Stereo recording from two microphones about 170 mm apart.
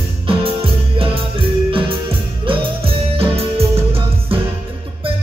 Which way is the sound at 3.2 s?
35° right (ahead or behind).